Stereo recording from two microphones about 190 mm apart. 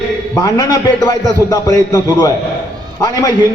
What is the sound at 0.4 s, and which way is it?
A man's voice, 20° left (ahead or behind).